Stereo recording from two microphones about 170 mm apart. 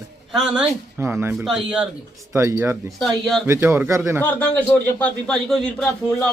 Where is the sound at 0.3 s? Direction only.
5° right (ahead or behind).